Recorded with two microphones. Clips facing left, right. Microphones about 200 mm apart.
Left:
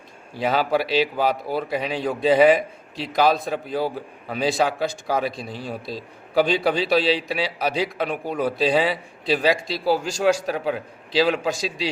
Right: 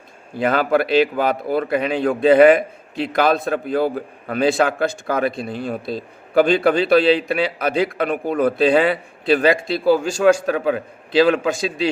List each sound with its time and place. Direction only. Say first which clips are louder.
0.3 s a man's voice: right 4 dB; 55° right (ahead or behind)